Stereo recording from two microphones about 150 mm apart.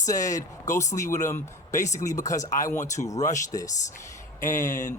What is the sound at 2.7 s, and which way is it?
Speech, 50° left (ahead or behind).